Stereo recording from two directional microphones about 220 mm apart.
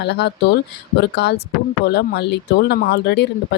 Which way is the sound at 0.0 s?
50° left (ahead or behind).